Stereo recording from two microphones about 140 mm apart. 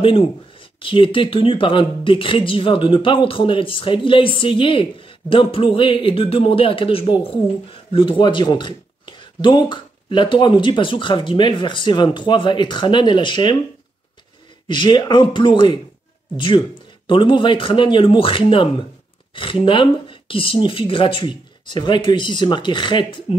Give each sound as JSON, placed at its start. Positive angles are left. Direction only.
{"t": 0.0, "sound": "speech", "side_deg": 40}
{"t": 14.7, "sound": "speech", "side_deg": 35}